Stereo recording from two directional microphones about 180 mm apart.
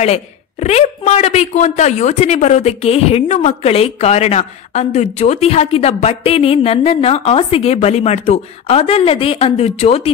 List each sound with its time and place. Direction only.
0.0 s speech: 35° left (ahead or behind)